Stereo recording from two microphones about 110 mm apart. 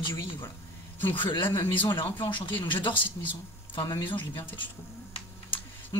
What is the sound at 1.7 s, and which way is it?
Speech, 50° left (ahead or behind).